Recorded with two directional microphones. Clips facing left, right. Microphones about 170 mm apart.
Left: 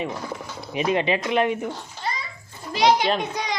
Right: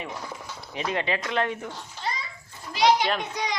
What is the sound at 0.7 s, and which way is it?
Speech, 15° left (ahead or behind).